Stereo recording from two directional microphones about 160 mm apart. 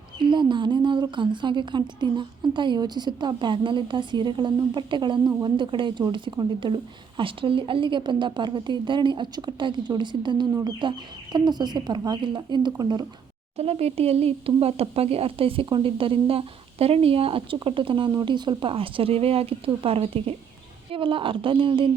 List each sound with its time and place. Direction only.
0.2 s a woman's voice: 30° right (ahead or behind)
13.6 s speech: 40° right (ahead or behind)